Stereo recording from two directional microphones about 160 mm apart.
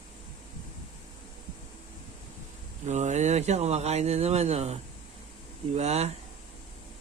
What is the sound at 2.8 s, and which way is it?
Speech, 45° right (ahead or behind).